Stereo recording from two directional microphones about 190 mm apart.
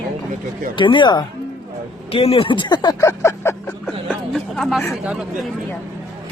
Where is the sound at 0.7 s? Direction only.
25° left (ahead or behind).